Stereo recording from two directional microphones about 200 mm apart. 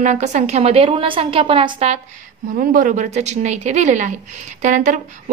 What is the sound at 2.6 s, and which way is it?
A woman's voice, 40° right (ahead or behind).